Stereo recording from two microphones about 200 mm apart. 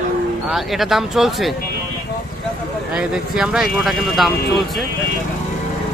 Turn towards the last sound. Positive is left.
turn(degrees=0)  # may be behind; listen again after turning